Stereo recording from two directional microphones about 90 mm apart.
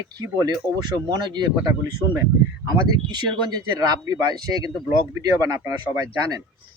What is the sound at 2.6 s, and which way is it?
Speech, 50° right (ahead or behind).